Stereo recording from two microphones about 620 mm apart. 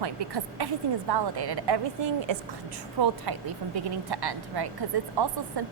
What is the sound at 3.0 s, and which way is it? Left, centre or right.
A woman's voice, right.